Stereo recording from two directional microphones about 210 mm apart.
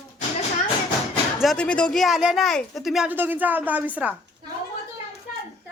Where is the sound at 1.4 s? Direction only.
Centre (ahead or behind).